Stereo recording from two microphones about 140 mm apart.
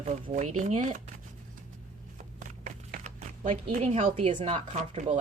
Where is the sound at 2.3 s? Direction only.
60° right (ahead or behind).